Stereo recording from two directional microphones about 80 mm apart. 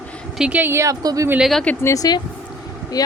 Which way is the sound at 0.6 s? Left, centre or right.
Right.